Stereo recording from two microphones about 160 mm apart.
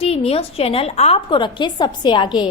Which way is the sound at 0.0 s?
40° left (ahead or behind).